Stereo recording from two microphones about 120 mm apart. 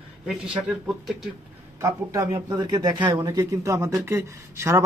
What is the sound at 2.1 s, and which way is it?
Speech, 35° right (ahead or behind).